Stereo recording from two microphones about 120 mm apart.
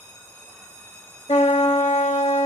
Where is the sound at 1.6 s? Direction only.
65° left (ahead or behind).